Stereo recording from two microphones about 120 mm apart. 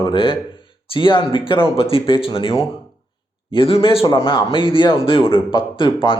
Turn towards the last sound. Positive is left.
turn(degrees=45)  # may be behind; listen again after turning